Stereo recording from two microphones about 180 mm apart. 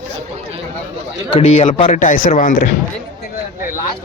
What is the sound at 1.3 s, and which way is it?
A man's voice, 40° left (ahead or behind).